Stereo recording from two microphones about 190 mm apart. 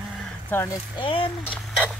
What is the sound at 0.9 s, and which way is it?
Speech, 25° left (ahead or behind).